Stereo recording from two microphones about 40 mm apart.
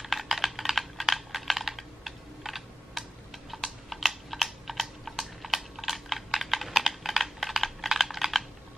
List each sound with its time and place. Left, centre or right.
0.0 s computer keyboard: centre
3.6 s typing: centre
6.9 s computer keyboard: centre